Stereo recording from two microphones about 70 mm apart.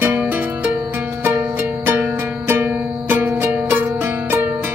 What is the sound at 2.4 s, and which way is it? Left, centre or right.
Music, right.